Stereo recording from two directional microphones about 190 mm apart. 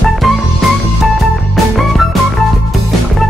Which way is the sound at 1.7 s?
Centre (ahead or behind).